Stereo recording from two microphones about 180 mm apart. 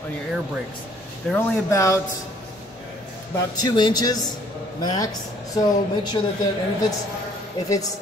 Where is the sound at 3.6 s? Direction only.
25° left (ahead or behind).